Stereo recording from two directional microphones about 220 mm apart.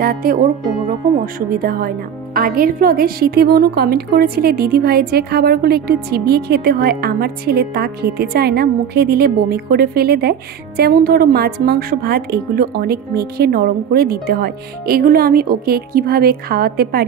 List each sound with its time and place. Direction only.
0.0 s a woman's voice: 40° right (ahead or behind)